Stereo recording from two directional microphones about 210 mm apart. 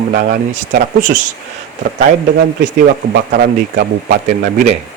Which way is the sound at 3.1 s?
50° right (ahead or behind).